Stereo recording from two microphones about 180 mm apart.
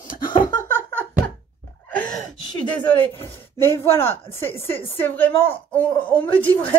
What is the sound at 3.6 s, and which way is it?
Speech, 15° left (ahead or behind).